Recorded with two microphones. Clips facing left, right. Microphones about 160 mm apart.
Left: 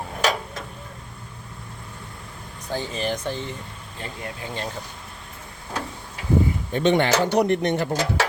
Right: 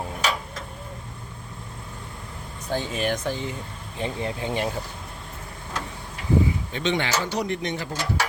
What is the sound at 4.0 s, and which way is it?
Speech, 25° right (ahead or behind).